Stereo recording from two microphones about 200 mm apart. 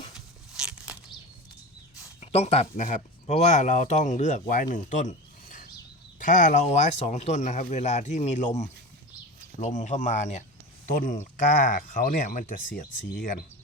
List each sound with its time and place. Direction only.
0.5 s a sound: 5° right (ahead or behind)
2.2 s speech: 30° left (ahead or behind)
9.6 s speech: 35° left (ahead or behind)